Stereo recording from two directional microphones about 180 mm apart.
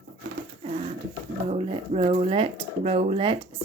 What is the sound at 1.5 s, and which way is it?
Speech, 35° right (ahead or behind).